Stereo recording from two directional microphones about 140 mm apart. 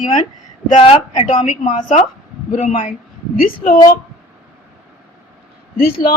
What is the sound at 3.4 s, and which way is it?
Speech, 85° left.